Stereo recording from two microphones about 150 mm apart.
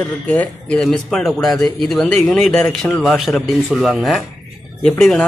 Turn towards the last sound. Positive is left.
turn(degrees=5)  # may be behind; listen again after turning